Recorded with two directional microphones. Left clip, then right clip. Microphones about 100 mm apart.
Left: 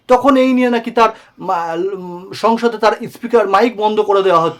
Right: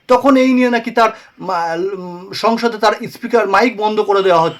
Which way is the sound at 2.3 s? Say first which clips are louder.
Left 1 dB; 55° left (ahead or behind).